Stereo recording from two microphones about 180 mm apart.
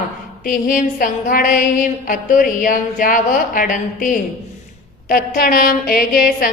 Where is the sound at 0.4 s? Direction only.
50° left (ahead or behind).